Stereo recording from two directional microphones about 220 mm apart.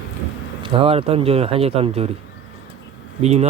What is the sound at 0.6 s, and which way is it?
A man's voice, 25° right (ahead or behind).